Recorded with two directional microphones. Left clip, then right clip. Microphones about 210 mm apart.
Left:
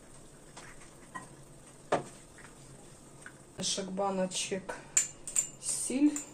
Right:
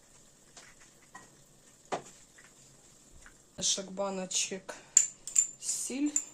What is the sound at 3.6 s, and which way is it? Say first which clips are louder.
Speech: even; 55° right (ahead or behind).